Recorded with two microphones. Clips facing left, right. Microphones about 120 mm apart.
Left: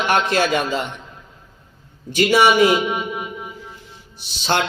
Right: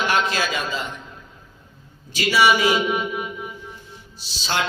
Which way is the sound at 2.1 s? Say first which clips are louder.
Left 4 dB; 55° left (ahead or behind).